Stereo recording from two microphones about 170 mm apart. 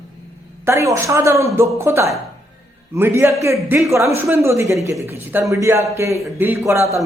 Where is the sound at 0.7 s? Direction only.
15° right (ahead or behind).